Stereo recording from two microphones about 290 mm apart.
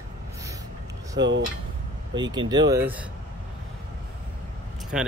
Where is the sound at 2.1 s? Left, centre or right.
Centre.